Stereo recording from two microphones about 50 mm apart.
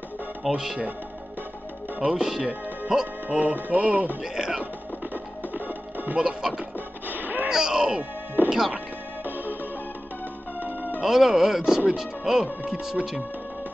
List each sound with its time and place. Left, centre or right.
0.5 s speech: centre
2.0 s speech: centre
3.3 s music: right
4.2 s speech: centre
5.5 s music: right
6.1 s speech: centre
7.1 s artillery fire: right
7.4 s speech: centre
11.1 s speech: centre